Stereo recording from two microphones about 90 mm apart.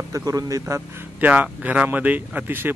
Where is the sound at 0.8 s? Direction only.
15° right (ahead or behind).